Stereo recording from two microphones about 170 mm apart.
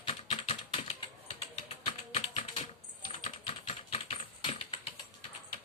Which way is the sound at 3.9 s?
35° left (ahead or behind).